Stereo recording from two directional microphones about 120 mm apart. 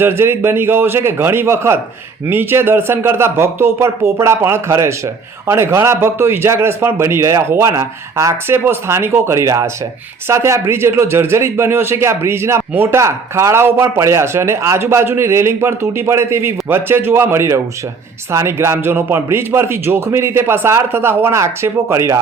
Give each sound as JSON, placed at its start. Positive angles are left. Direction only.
{"t": 0.0, "sound": "speech", "side_deg": -20}